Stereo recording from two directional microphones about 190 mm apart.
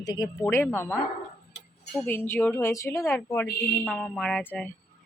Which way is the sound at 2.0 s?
10° left (ahead or behind).